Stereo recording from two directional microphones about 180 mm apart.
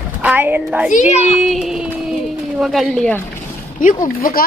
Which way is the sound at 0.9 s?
45° left (ahead or behind).